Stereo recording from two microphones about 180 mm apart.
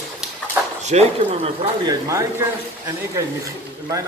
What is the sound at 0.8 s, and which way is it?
Speech, 35° right (ahead or behind).